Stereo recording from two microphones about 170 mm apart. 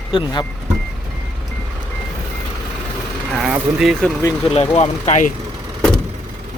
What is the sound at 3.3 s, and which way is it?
Speech, 5° right (ahead or behind).